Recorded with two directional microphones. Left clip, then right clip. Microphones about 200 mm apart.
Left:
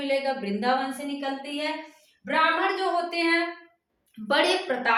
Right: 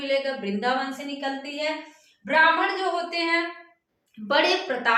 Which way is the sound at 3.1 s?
15° left (ahead or behind).